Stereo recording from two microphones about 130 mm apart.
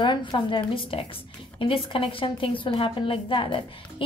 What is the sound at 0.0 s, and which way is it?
A woman's voice, 35° left (ahead or behind).